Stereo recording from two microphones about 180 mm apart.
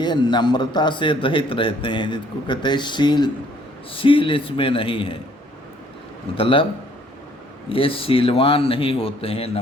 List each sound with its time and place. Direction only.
0.0 s a man's voice: 25° left (ahead or behind)
6.3 s a man's voice: 30° left (ahead or behind)
7.7 s a man's voice: 30° left (ahead or behind)